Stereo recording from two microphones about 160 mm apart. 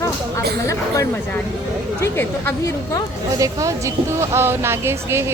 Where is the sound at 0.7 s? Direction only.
20° left (ahead or behind).